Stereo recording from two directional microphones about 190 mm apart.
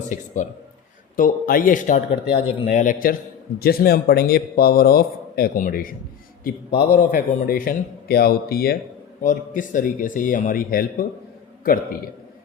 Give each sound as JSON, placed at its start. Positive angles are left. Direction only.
{"t": 0.4, "sound": "a man's voice", "side_deg": 40}
{"t": 2.3, "sound": "speech", "side_deg": 25}
{"t": 2.7, "sound": "a man's voice", "side_deg": 45}